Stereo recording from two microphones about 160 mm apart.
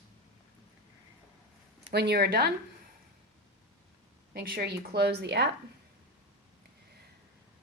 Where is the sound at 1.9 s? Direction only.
90° right.